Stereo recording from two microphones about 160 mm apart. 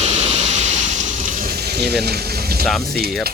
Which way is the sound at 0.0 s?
40° right (ahead or behind).